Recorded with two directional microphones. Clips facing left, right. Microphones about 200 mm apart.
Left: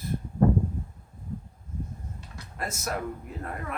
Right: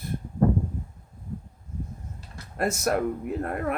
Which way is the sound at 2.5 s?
60° right (ahead or behind).